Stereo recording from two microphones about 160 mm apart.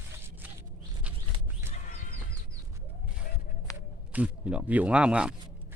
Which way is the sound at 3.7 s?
20° left (ahead or behind).